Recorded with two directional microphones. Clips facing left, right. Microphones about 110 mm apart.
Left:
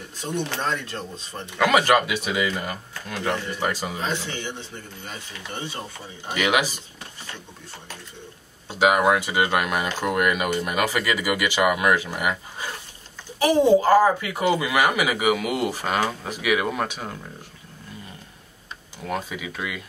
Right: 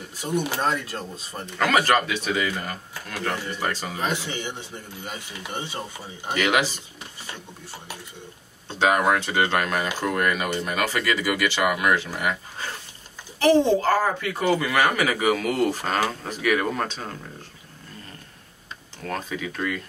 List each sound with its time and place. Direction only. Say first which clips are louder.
0.2 s speech: right 2 dB; 10° right (ahead or behind)
1.4 s speech: left 2 dB; 15° left (ahead or behind)
4.0 s speech: right 1 dB; 15° right (ahead or behind)
6.3 s speech: even; 15° left (ahead or behind)
8.6 s speech: left 2 dB; 10° left (ahead or behind)
18.9 s speech: left 1 dB; 10° left (ahead or behind)